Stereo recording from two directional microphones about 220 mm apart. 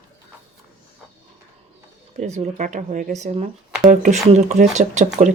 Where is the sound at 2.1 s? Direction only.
30° right (ahead or behind).